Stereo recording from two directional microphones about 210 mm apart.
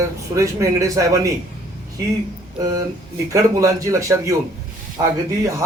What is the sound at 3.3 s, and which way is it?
Speech, 15° right (ahead or behind).